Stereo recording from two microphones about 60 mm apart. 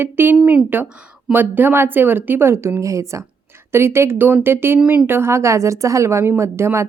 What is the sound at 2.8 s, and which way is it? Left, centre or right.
Speech, right.